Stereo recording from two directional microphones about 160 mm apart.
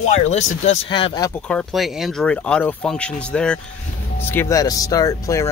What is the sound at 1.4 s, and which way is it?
Speech, 5° left (ahead or behind).